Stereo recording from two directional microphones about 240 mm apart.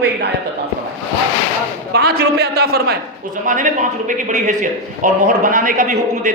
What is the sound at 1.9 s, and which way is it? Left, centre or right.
A man's voice, right.